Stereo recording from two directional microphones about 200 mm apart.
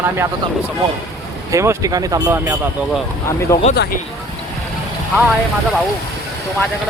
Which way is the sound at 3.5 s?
15° left (ahead or behind).